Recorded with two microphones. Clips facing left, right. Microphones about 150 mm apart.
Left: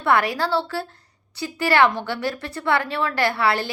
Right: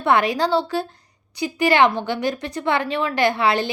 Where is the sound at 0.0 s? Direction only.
20° right (ahead or behind).